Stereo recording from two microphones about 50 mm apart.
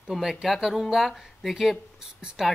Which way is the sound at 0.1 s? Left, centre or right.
Centre.